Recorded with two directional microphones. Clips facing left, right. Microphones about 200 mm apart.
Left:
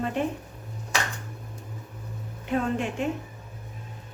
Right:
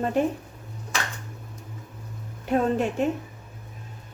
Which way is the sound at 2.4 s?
40° right (ahead or behind).